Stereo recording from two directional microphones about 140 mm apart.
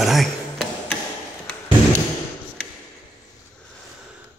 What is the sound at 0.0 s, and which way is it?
Tick-tock, centre (ahead or behind).